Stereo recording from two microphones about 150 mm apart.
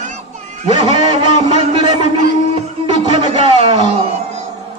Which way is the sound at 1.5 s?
35° right (ahead or behind).